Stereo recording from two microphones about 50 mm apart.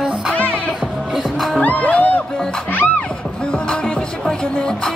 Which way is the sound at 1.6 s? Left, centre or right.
Left.